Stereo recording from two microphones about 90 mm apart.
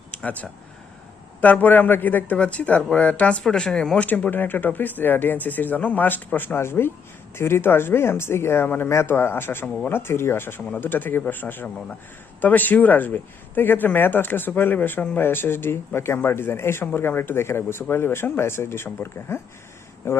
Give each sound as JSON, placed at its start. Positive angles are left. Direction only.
{"t": 0.2, "sound": "a man's voice", "side_deg": 15}